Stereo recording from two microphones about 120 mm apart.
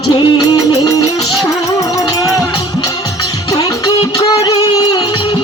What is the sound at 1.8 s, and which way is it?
Music, 30° left (ahead or behind).